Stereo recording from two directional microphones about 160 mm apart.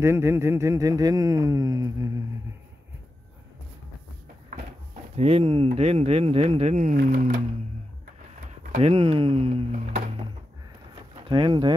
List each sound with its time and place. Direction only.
0.0 s speech: 15° right (ahead or behind)
5.1 s speech: 40° right (ahead or behind)
7.0 s speech: 60° right (ahead or behind)
8.7 s speech: 40° right (ahead or behind)
11.2 s speech: 30° right (ahead or behind)